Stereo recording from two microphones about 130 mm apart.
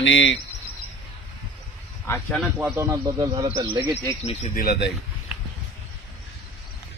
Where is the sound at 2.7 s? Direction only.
25° right (ahead or behind).